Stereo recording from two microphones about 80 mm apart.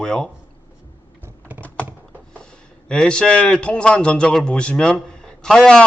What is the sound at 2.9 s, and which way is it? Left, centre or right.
Speech, centre.